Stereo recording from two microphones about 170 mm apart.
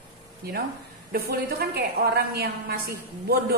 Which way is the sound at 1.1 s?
65° right (ahead or behind).